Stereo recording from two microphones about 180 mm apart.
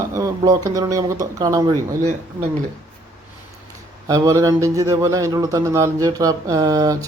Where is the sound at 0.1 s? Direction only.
20° right (ahead or behind).